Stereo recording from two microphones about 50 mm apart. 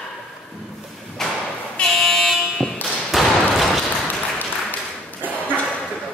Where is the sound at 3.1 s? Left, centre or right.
Centre.